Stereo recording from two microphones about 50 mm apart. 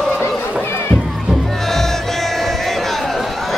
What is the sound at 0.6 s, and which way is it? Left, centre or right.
Music, left.